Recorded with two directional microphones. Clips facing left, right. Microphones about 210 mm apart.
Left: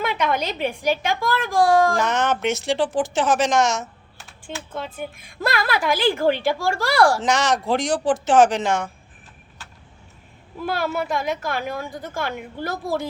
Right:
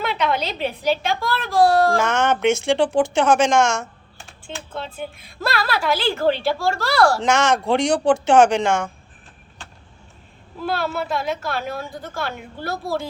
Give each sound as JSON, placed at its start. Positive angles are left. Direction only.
{"t": 0.2, "sound": "a woman's voice", "side_deg": 50}
{"t": 0.9, "sound": "speech", "side_deg": 15}
{"t": 2.0, "sound": "speech", "side_deg": 0}
{"t": 4.5, "sound": "speech", "side_deg": 10}
{"t": 7.2, "sound": "speech", "side_deg": 0}
{"t": 10.6, "sound": "speech", "side_deg": 15}
{"t": 12.6, "sound": "a woman's voice", "side_deg": 50}